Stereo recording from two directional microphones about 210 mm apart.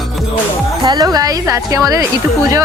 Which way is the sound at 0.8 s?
20° right (ahead or behind).